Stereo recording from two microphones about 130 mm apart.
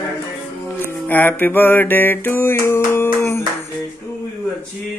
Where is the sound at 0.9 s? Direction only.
15° left (ahead or behind).